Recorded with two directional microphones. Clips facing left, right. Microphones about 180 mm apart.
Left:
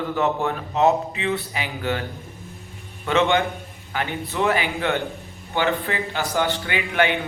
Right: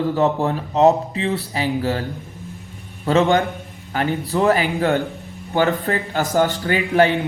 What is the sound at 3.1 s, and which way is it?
Speech, 35° right (ahead or behind).